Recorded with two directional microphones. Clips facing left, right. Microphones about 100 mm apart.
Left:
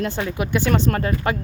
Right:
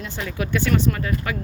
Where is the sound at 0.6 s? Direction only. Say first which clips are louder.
Left 2 dB; 35° left (ahead or behind).